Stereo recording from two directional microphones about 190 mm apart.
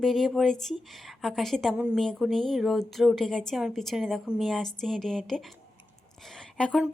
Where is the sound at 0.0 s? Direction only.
Centre (ahead or behind).